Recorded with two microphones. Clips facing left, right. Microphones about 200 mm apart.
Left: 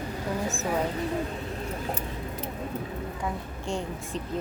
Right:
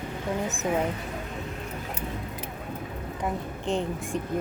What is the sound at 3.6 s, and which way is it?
Speech, 20° right (ahead or behind).